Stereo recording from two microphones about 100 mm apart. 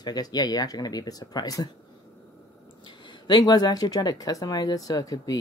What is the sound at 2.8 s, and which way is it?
Speech, 45° left (ahead or behind).